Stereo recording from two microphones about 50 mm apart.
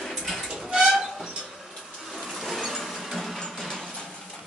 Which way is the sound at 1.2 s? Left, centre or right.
Centre.